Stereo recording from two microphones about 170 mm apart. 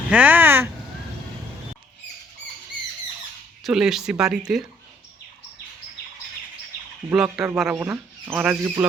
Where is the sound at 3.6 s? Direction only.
5° right (ahead or behind).